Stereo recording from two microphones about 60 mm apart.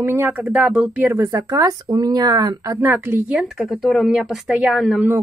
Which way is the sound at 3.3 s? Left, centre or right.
Centre.